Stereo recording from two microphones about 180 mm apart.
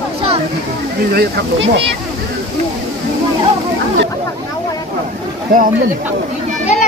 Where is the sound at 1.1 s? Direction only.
70° right (ahead or behind).